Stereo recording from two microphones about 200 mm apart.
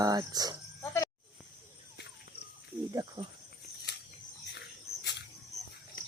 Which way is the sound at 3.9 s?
55° left (ahead or behind).